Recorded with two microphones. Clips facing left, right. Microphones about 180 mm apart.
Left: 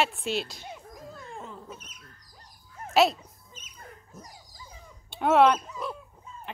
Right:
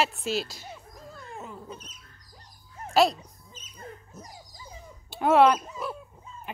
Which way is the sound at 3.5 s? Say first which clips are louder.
Right 5 dB; 35° right (ahead or behind).